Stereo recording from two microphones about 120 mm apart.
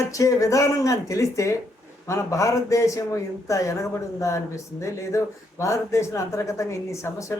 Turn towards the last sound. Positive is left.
turn(degrees=25)  # may be behind; listen again after turning